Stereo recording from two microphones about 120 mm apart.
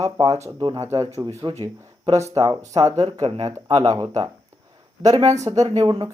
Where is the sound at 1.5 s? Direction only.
45° right (ahead or behind).